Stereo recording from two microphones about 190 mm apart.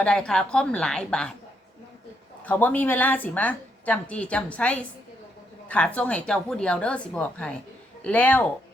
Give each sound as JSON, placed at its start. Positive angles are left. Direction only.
{"t": 0.0, "sound": "a woman's voice", "side_deg": 5}
{"t": 2.4, "sound": "a woman's voice", "side_deg": 10}